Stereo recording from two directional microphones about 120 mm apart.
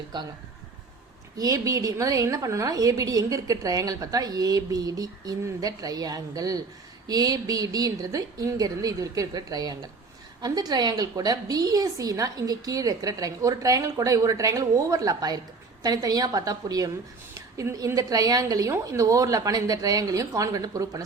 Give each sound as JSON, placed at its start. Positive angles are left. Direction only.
{"t": 0.1, "sound": "a woman's voice", "side_deg": -40}
{"t": 1.4, "sound": "a woman's voice", "side_deg": -30}